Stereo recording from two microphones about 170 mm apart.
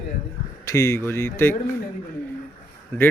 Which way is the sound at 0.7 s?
15° left (ahead or behind).